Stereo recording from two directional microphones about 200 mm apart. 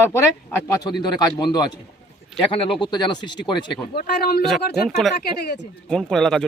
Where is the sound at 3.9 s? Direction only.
50° left (ahead or behind).